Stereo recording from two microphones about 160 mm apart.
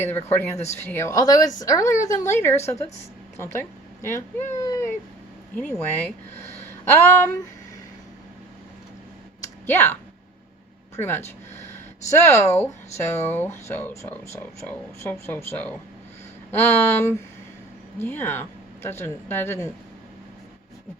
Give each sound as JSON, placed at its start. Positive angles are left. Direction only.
{"t": 0.0, "sound": "a woman's voice", "side_deg": 15}
{"t": 4.0, "sound": "speech", "side_deg": 15}
{"t": 4.5, "sound": "cat", "side_deg": 20}
{"t": 5.5, "sound": "speech", "side_deg": 10}
{"t": 9.6, "sound": "speech", "side_deg": 15}